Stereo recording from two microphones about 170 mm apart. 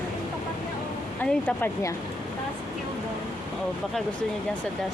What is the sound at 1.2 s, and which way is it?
Speech, 10° left (ahead or behind).